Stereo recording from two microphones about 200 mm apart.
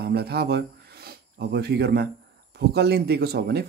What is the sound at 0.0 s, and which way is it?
Speech, 55° right (ahead or behind).